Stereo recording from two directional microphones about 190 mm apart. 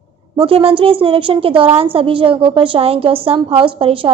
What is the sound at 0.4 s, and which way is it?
A woman's voice, 30° right (ahead or behind).